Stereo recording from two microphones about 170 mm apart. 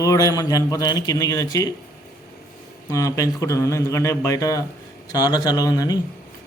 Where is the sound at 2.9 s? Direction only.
20° left (ahead or behind).